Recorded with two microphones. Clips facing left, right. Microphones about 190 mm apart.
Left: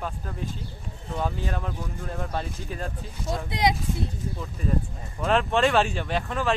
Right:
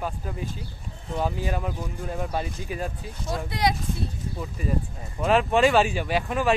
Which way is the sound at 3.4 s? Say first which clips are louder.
Left 1 dB; 20° left (ahead or behind).